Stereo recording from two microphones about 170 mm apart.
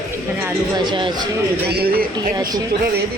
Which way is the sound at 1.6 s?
65° right (ahead or behind).